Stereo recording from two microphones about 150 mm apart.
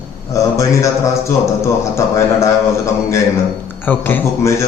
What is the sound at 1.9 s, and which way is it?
Speech, 20° left (ahead or behind).